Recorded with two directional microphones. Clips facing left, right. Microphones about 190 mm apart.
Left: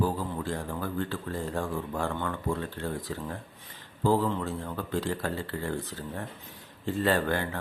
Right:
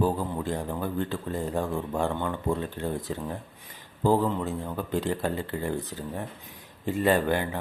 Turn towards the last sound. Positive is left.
turn(degrees=-15)  # may be behind; listen again after turning